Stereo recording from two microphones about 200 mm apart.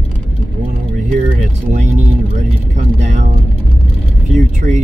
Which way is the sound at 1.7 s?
35° right (ahead or behind).